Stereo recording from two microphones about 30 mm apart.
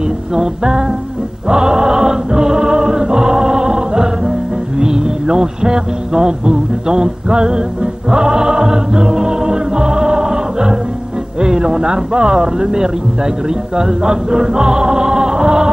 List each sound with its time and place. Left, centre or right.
0.4 s music: right
11.4 s speech: right
13.7 s music: right